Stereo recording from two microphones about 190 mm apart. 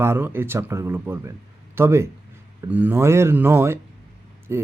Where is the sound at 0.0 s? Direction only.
10° right (ahead or behind).